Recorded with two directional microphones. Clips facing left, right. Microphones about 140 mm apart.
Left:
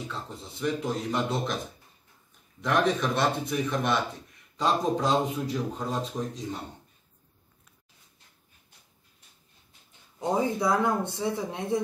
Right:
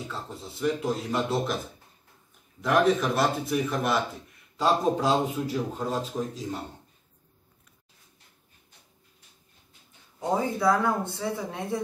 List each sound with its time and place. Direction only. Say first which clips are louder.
0.1 s speech: right 1 dB; centre (ahead or behind)
2.6 s speech: right 3 dB; 5° right (ahead or behind)
10.6 s speech: right 1 dB; 20° left (ahead or behind)